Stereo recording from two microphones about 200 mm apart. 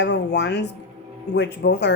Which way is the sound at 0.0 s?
60° left (ahead or behind).